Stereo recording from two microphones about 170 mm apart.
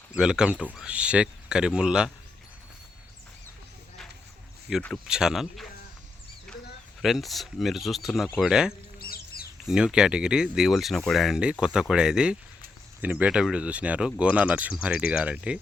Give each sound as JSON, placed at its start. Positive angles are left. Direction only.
{"t": 0.1, "sound": "speech", "side_deg": -5}
{"t": 4.7, "sound": "speech", "side_deg": -5}
{"t": 7.0, "sound": "speech", "side_deg": 0}
{"t": 9.0, "sound": "bird", "side_deg": 60}
{"t": 9.6, "sound": "speech", "side_deg": -5}